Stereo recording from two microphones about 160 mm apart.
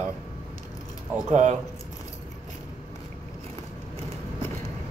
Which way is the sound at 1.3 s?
45° right (ahead or behind).